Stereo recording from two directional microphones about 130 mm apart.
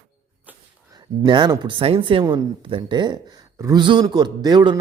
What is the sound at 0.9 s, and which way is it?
A woman's voice, 35° right (ahead or behind).